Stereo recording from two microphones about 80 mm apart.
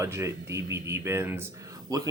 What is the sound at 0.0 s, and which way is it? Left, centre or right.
Speech, right.